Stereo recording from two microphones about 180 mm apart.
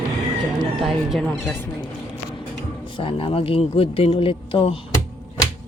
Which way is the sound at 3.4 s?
30° left (ahead or behind).